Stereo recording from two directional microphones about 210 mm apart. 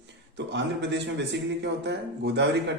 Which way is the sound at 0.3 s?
55° right (ahead or behind).